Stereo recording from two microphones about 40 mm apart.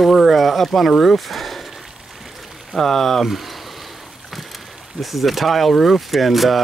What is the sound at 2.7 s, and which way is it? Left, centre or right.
Speech, centre.